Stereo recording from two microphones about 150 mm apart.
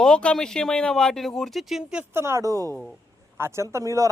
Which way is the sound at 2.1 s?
15° right (ahead or behind).